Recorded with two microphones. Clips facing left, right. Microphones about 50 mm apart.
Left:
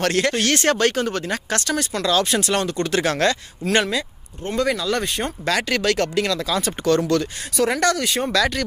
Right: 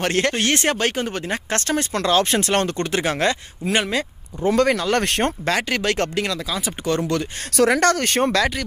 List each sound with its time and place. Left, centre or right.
0.0 s speech: right
1.6 s speech: right
2.9 s speech: right
4.6 s speech: right
5.4 s speech: right
6.5 s speech: centre
6.9 s speech: right
7.5 s speech: right
7.8 s speech: right